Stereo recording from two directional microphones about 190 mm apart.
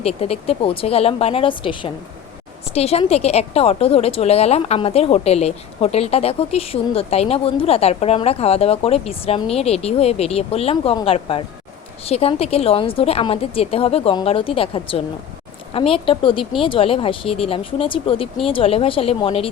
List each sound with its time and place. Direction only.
0.0 s a woman's voice: 30° left (ahead or behind)